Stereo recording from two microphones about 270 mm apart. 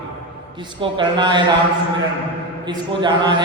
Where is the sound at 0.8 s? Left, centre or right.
Centre.